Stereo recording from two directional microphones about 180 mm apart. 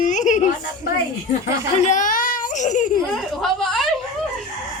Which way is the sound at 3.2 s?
Centre (ahead or behind).